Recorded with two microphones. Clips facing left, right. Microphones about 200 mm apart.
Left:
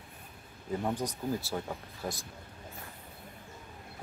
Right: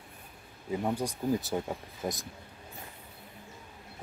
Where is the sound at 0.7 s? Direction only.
10° right (ahead or behind).